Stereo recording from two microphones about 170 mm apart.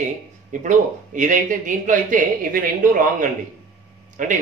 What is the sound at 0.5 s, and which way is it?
Speech, 50° right (ahead or behind).